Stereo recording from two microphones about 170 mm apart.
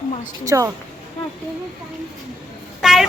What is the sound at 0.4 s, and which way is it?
Speech, 20° right (ahead or behind).